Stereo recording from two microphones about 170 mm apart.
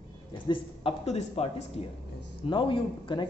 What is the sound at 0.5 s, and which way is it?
A man's voice, 35° left (ahead or behind).